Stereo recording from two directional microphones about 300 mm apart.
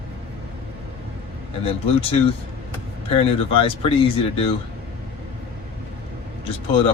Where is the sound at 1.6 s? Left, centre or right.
Centre.